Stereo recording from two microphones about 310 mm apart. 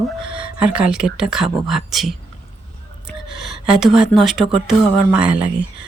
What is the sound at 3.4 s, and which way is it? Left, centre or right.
Speech, centre.